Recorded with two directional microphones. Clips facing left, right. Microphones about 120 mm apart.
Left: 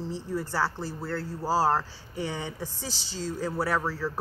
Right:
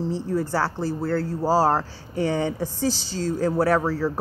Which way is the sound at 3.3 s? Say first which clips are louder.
Right 8 dB; 45° right (ahead or behind).